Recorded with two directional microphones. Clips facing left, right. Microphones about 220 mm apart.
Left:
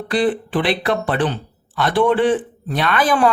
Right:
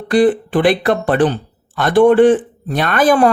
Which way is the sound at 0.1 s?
45° right (ahead or behind).